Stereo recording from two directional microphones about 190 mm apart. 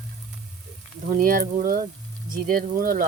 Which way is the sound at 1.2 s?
45° right (ahead or behind).